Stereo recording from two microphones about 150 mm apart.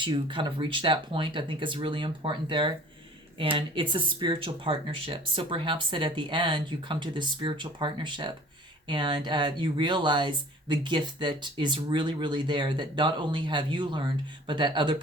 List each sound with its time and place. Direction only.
0.0 s speech: 35° right (ahead or behind)